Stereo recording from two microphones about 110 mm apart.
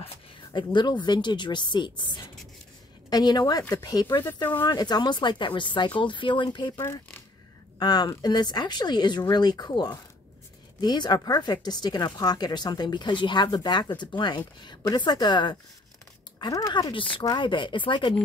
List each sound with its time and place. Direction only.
0.5 s speech: 45° left (ahead or behind)
6.8 s speech: 25° left (ahead or behind)
7.8 s a woman's voice: 35° left (ahead or behind)